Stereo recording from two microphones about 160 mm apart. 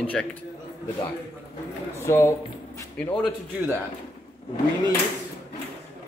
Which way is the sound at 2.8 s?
15° left (ahead or behind).